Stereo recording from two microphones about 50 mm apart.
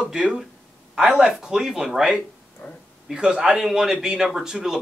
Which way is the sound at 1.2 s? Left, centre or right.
Centre.